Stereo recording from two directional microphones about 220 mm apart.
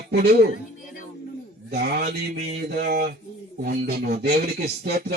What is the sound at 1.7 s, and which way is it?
A man's voice, 45° right (ahead or behind).